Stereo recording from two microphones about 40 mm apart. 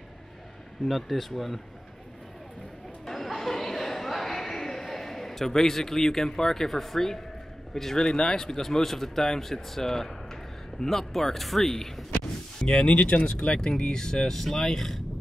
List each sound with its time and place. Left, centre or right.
0.8 s speech: centre
3.1 s a sound: centre
7.7 s speech: centre
12.1 s speech: left